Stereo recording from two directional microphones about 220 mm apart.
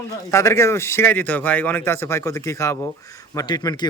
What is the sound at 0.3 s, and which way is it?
Speech, 15° left (ahead or behind).